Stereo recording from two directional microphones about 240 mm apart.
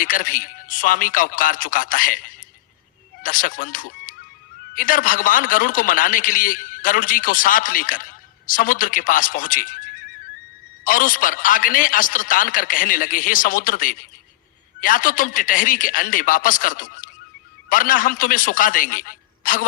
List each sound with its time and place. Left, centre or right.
0.0 s a man's voice: left